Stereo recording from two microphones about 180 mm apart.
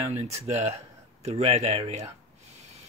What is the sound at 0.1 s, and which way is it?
Speech, 35° right (ahead or behind).